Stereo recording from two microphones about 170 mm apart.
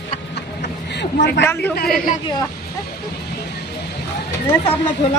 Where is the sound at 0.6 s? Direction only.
90° left.